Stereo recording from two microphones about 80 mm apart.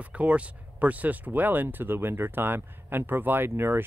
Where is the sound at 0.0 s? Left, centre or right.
Centre.